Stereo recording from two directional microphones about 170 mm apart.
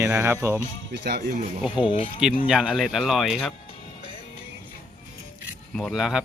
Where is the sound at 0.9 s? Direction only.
75° right (ahead or behind).